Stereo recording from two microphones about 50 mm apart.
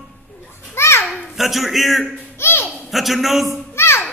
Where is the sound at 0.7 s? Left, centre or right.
Left.